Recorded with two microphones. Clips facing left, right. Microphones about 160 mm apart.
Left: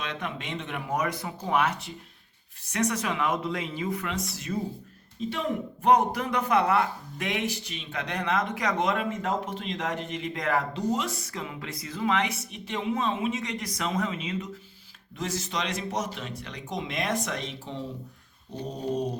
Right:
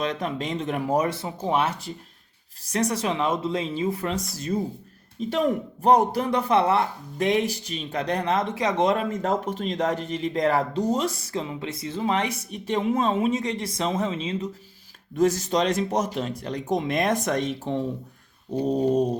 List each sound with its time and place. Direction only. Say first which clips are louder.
0.0 s speech: right 7 dB; 35° right (ahead or behind)
2.7 s speech: right 3 dB; 30° right (ahead or behind)
5.8 s speech: right 3 dB; 35° right (ahead or behind)
15.1 s speech: right 11 dB; 45° right (ahead or behind)